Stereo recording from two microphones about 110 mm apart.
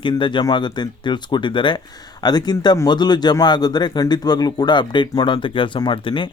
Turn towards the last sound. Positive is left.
turn(degrees=50)  # may be behind; listen again after turning